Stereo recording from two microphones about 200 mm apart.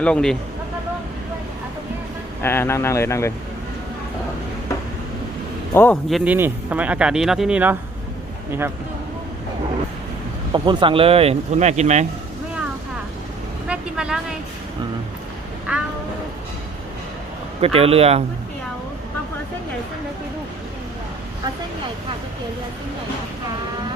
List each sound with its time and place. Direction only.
0.0 s a man's voice: 5° left (ahead or behind)
2.4 s speech: 10° left (ahead or behind)
5.7 s a man's voice: 10° left (ahead or behind)
10.5 s speech: 25° right (ahead or behind)
13.7 s vehicle: 5° right (ahead or behind)
17.6 s speech: 30° right (ahead or behind)